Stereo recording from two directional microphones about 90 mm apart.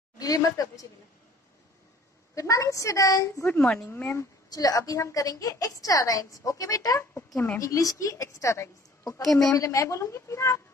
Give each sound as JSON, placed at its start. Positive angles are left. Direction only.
{"t": 0.2, "sound": "speech", "side_deg": 40}
{"t": 2.3, "sound": "a woman's voice", "side_deg": 35}
{"t": 3.9, "sound": "speech", "side_deg": 25}
{"t": 4.5, "sound": "a woman's voice", "side_deg": 45}
{"t": 9.2, "sound": "a woman's voice", "side_deg": 5}
{"t": 9.5, "sound": "a woman's voice", "side_deg": 35}